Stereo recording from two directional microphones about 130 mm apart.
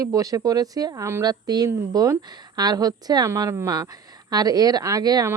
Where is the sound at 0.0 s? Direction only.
25° right (ahead or behind).